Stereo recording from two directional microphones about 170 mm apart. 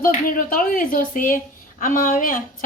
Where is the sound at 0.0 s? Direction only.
55° left (ahead or behind).